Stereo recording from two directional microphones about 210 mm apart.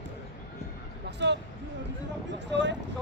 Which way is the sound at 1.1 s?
55° right (ahead or behind).